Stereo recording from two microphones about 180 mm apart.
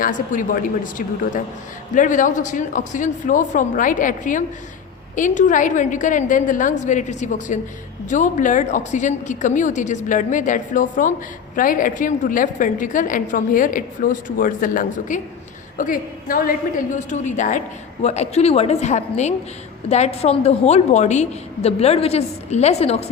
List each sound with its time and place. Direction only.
0.0 s a woman's voice: 45° left (ahead or behind)